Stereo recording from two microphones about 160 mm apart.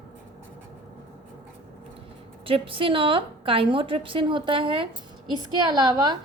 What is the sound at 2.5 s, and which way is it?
A woman's voice, 35° right (ahead or behind).